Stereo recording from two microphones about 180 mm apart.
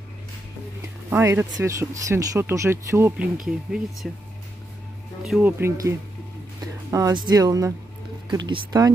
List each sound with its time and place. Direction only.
1.1 s speech: 15° right (ahead or behind)
5.2 s speech: centre (ahead or behind)
5.6 s speech: 15° right (ahead or behind)